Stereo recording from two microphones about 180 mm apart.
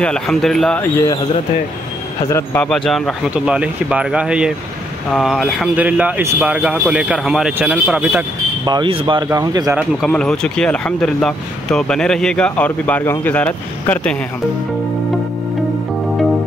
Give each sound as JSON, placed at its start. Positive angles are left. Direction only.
{"t": 0.0, "sound": "speech", "side_deg": 5}
{"t": 2.2, "sound": "speech", "side_deg": 10}
{"t": 8.6, "sound": "speech", "side_deg": -25}
{"t": 10.0, "sound": "speech", "side_deg": 5}